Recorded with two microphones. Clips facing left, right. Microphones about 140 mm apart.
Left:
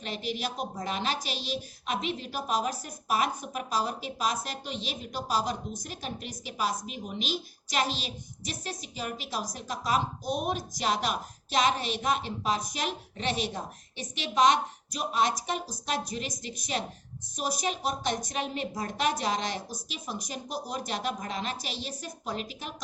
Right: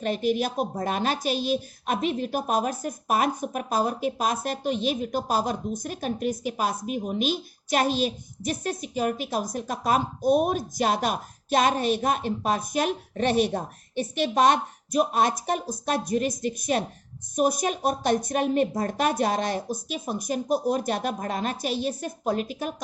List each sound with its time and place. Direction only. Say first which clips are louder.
0.0 s a woman's voice: right 9 dB; 50° right (ahead or behind)